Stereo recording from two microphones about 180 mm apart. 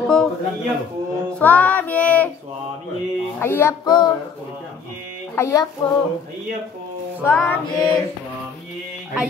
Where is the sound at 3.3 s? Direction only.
10° left (ahead or behind).